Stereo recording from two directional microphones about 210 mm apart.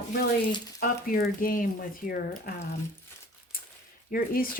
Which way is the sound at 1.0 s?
45° left (ahead or behind).